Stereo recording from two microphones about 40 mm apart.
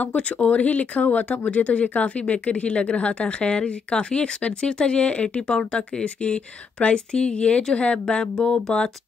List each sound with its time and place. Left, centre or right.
0.0 s speech: left